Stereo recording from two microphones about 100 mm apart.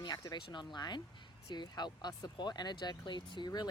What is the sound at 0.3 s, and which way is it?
Speech, 50° left (ahead or behind).